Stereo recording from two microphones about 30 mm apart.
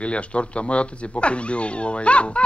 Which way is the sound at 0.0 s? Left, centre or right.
Left.